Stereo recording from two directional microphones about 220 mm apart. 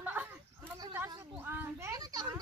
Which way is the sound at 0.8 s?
20° right (ahead or behind).